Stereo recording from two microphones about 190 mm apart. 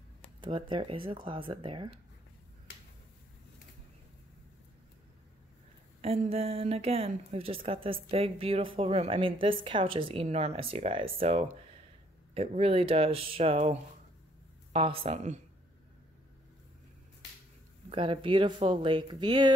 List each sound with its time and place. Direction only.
0.4 s speech: 25° right (ahead or behind)
5.9 s a woman's voice: 30° right (ahead or behind)
17.8 s speech: 30° right (ahead or behind)